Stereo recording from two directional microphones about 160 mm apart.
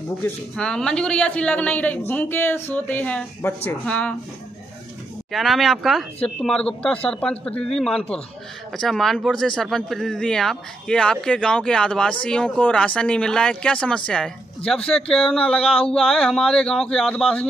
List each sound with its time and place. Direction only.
0.2 s speech: 5° left (ahead or behind)
5.3 s speech: centre (ahead or behind)
15.6 s a sound: 35° left (ahead or behind)
15.9 s speech: centre (ahead or behind)